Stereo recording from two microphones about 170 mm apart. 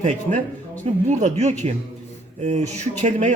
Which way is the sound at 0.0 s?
45° right (ahead or behind).